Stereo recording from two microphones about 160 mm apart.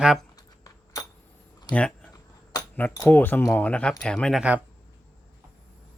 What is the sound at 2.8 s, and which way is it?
Speech, 10° left (ahead or behind).